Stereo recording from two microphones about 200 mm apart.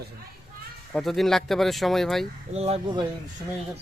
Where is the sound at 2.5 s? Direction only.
30° right (ahead or behind).